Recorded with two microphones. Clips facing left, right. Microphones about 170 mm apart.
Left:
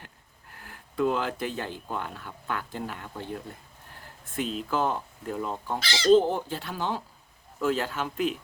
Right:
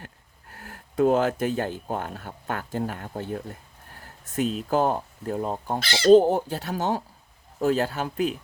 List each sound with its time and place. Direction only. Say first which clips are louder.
0.5 s speech: right 5 dB; 45° right (ahead or behind)
4.0 s a sound: right 5 dB; 45° right (ahead or behind)
4.7 s speech: right 4 dB; 40° right (ahead or behind)
5.8 s speech: right 4 dB; 55° right (ahead or behind)
6.1 s speech: right 5 dB; 40° right (ahead or behind)